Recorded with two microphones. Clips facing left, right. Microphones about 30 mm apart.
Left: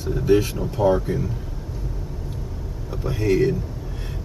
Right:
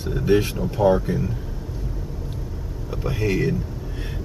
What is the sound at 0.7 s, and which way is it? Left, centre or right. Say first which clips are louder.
Speech: right 1 dB; centre.